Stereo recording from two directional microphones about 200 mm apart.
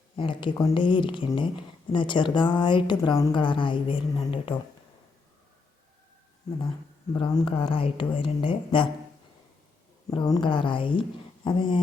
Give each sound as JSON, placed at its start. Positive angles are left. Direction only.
{"t": 0.2, "sound": "a woman's voice", "side_deg": 25}
{"t": 7.1, "sound": "a woman's voice", "side_deg": 25}
{"t": 10.1, "sound": "a woman's voice", "side_deg": 15}